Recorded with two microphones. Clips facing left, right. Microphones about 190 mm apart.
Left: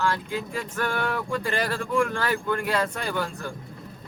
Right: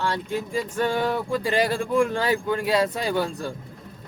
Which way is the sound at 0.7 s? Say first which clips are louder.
Right 4 dB; 25° right (ahead or behind).